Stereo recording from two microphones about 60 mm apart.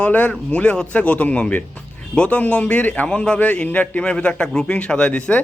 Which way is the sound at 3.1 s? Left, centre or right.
Centre.